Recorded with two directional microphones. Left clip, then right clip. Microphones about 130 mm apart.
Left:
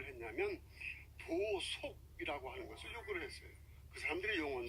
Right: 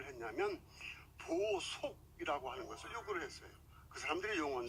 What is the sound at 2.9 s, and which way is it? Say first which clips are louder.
Speech: right 1 dB; 35° left (ahead or behind).